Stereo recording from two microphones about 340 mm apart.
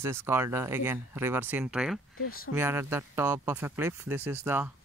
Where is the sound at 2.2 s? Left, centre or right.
Left.